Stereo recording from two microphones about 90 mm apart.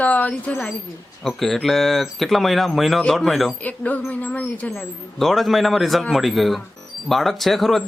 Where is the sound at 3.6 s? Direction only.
15° left (ahead or behind).